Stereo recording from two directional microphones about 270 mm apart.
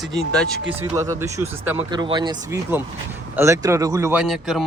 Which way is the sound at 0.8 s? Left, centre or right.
Centre.